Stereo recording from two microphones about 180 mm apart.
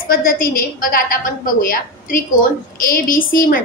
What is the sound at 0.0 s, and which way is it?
A woman's voice, 55° left (ahead or behind).